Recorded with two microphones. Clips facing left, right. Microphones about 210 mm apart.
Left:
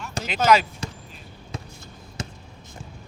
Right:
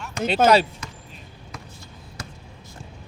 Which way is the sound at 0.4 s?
30° right (ahead or behind).